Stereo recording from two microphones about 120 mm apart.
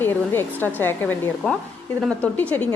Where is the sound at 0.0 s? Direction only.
15° left (ahead or behind).